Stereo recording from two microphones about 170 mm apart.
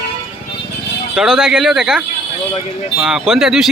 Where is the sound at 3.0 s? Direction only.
Centre (ahead or behind).